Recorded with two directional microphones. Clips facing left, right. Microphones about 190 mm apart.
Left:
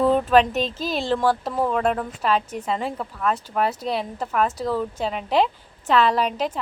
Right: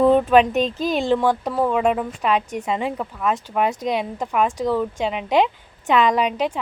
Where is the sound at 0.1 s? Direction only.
Centre (ahead or behind).